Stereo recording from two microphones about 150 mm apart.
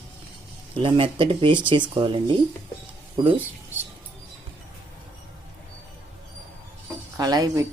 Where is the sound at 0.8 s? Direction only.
35° right (ahead or behind).